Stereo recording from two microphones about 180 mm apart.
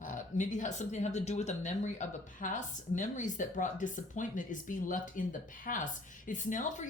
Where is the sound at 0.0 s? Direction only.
45° left (ahead or behind).